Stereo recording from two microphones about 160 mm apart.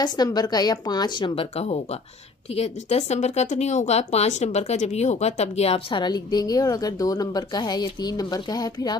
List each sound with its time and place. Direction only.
0.0 s speech: 25° left (ahead or behind)